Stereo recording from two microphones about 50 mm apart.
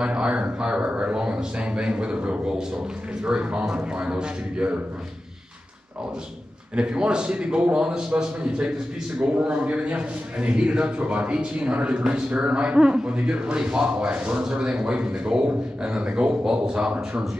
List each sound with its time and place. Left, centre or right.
0.0 s a man's voice: right
6.7 s a man's voice: right
12.3 s a man's voice: right